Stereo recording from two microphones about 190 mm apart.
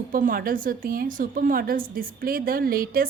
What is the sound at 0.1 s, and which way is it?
A woman's voice, 45° right (ahead or behind).